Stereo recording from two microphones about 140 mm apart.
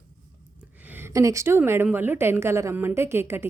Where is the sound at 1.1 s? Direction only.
25° right (ahead or behind).